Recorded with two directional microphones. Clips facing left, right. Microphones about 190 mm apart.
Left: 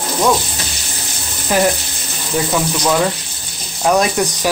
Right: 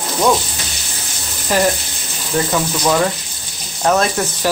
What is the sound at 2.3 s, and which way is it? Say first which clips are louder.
Speech: even; centre (ahead or behind).